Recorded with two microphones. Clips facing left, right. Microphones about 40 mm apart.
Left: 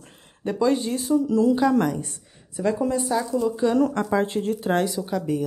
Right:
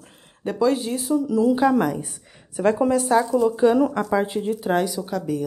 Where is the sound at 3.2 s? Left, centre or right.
Centre.